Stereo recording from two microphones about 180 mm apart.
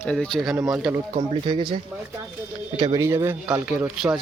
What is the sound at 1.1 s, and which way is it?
Speech, 25° right (ahead or behind).